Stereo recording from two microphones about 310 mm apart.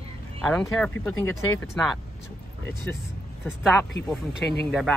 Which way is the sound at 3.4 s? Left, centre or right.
Centre.